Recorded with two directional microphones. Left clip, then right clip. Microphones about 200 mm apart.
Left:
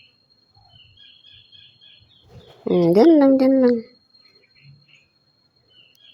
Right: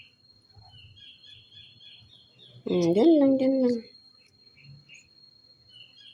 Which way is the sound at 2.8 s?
20° left (ahead or behind).